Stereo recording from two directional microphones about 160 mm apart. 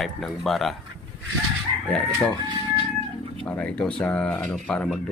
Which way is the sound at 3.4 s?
10° left (ahead or behind).